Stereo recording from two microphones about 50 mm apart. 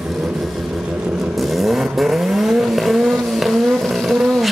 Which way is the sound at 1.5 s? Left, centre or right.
Centre.